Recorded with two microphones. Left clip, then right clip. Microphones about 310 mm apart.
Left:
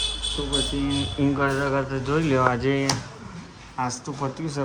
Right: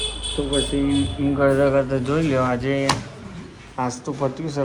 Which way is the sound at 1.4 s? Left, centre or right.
Centre.